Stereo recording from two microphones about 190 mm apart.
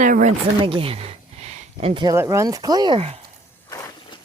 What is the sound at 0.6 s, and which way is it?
Speech, 30° right (ahead or behind).